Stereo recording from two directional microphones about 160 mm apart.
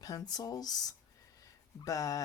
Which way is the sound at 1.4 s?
20° left (ahead or behind).